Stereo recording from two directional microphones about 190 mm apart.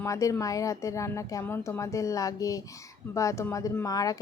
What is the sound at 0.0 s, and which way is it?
Speech, 15° left (ahead or behind).